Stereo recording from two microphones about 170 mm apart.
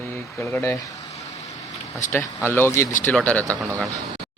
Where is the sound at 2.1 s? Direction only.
15° left (ahead or behind).